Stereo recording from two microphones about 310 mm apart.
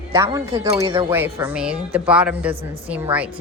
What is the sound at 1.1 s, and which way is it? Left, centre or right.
A woman's voice, centre.